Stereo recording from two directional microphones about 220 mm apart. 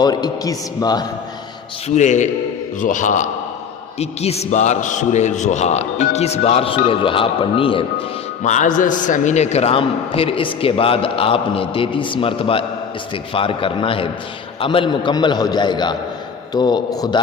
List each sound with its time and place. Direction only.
0.0 s a man's voice: 20° left (ahead or behind)
2.0 s a man's voice: 35° left (ahead or behind)
8.4 s a man's voice: 35° left (ahead or behind); by 17.2 s 20° left (ahead or behind)